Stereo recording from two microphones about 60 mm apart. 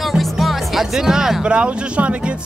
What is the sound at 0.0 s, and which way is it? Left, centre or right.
Speech, centre.